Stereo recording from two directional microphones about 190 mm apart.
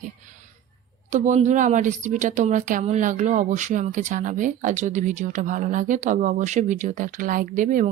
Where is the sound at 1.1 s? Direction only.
40° right (ahead or behind).